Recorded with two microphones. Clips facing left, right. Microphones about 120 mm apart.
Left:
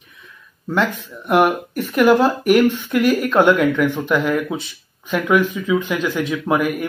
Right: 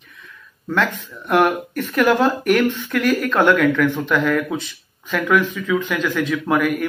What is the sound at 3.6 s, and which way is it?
Speech, 15° left (ahead or behind).